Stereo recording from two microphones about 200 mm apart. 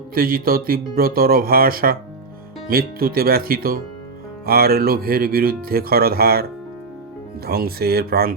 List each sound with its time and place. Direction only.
0.1 s speech: 45° right (ahead or behind)
7.4 s speech: 50° right (ahead or behind)